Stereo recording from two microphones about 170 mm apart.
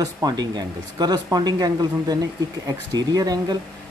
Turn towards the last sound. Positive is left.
turn(degrees=-20)  # may be behind; listen again after turning